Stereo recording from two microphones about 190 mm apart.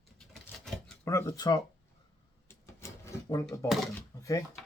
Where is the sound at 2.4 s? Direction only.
15° left (ahead or behind).